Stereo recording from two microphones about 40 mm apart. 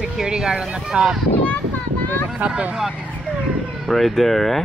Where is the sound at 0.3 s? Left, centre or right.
Centre.